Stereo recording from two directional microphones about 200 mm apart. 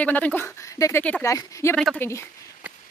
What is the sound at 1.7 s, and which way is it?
Speech, 5° left (ahead or behind).